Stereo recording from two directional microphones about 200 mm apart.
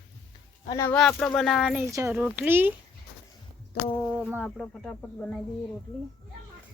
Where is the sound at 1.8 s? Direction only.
15° right (ahead or behind).